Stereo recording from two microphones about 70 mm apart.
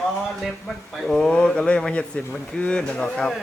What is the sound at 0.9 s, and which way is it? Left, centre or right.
Speech, centre.